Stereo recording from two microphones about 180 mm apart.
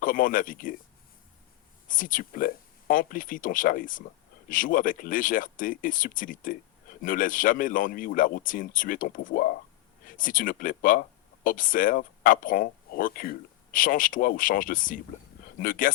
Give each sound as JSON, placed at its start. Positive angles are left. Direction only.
{"t": 0.0, "sound": "speech", "side_deg": 50}
{"t": 1.9, "sound": "speech", "side_deg": 50}